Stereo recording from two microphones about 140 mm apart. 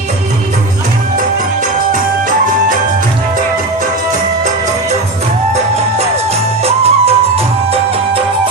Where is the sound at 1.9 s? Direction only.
75° right (ahead or behind).